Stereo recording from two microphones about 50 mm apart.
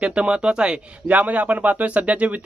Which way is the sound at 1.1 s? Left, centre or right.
Right.